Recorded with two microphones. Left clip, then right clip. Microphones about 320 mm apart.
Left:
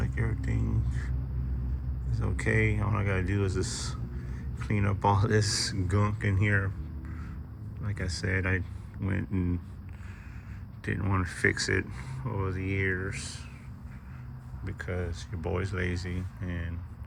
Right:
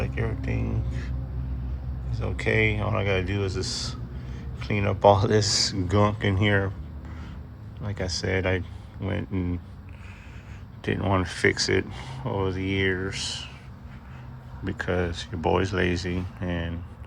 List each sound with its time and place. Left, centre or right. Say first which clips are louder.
0.2 s a sound: right 5 dB; centre
2.0 s speech: right 5 dB; centre
7.9 s speech: right 6 dB; centre
10.8 s speech: right 7 dB; centre
14.6 s speech: right 9 dB; right